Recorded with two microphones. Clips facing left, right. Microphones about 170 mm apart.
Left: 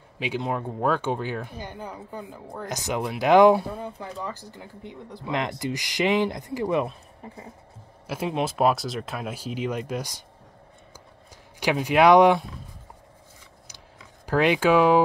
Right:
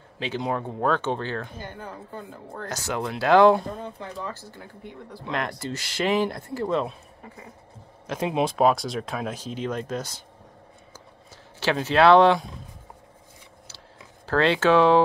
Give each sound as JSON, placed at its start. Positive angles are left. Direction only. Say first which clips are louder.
{"t": 0.4, "sound": "speech", "louder": "right 1 dB", "side_deg": 5}
{"t": 8.3, "sound": "speech", "louder": "right 2 dB", "side_deg": 0}
{"t": 11.6, "sound": "speech", "louder": "even", "side_deg": 15}
{"t": 14.2, "sound": "speech", "louder": "even", "side_deg": 15}